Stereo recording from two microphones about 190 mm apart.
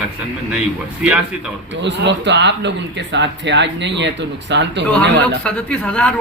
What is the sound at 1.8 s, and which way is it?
Speech, 65° right (ahead or behind).